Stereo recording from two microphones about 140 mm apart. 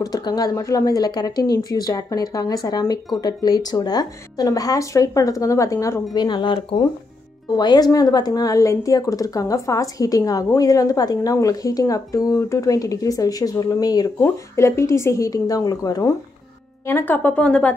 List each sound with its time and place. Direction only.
0.0 s speech: 25° left (ahead or behind)
6.2 s speech: 35° left (ahead or behind); by 17.7 s 10° left (ahead or behind)